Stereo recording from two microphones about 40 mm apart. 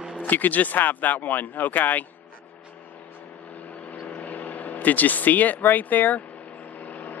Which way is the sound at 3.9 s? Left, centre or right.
Left.